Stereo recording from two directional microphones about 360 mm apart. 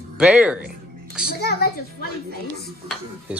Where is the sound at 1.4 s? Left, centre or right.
Left.